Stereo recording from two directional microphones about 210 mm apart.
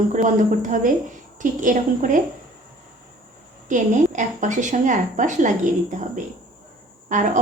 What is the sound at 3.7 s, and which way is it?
A woman's voice, 35° right (ahead or behind).